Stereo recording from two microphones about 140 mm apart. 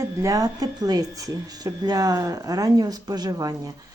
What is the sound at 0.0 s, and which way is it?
Speech, 25° right (ahead or behind).